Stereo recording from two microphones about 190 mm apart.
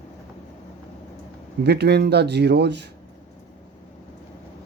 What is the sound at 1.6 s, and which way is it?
Speech, 60° right (ahead or behind).